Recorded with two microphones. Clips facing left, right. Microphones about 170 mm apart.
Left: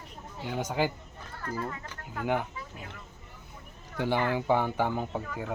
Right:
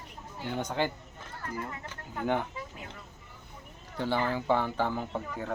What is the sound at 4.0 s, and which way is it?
Speech, 15° left (ahead or behind).